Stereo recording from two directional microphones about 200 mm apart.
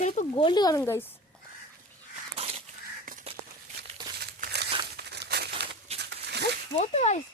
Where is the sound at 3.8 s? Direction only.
55° right (ahead or behind).